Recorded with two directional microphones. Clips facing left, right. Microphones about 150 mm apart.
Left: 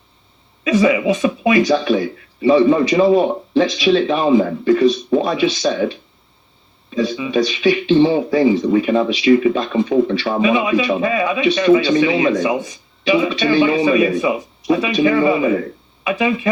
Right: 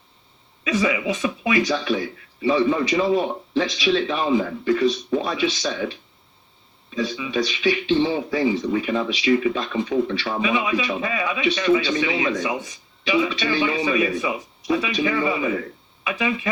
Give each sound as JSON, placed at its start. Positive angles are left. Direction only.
{"t": 0.6, "sound": "speech", "side_deg": 30}
{"t": 6.9, "sound": "speech", "side_deg": 35}